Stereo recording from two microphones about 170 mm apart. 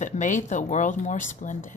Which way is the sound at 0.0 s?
45° left (ahead or behind).